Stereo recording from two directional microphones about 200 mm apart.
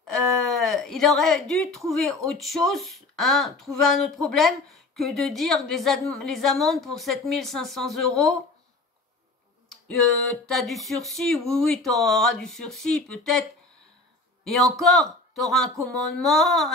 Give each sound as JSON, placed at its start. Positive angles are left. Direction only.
{"t": 0.0, "sound": "a sound", "side_deg": 0}
{"t": 2.2, "sound": "speech", "side_deg": 0}
{"t": 9.7, "sound": "speech", "side_deg": 5}